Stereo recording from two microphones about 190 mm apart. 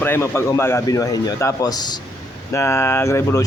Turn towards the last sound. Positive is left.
turn(degrees=15)  # may be behind; listen again after turning